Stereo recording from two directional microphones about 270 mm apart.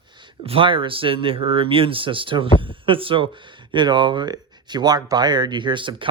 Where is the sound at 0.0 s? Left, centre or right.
Centre.